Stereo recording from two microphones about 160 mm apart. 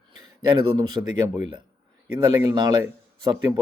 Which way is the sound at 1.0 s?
20° right (ahead or behind).